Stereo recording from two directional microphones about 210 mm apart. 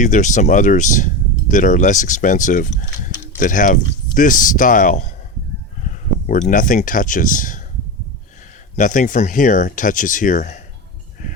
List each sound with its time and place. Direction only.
0.0 s speech: 35° left (ahead or behind)
6.5 s speech: 40° left (ahead or behind)
8.7 s speech: 40° left (ahead or behind)